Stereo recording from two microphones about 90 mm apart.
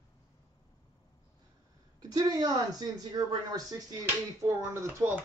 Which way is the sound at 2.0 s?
45° right (ahead or behind).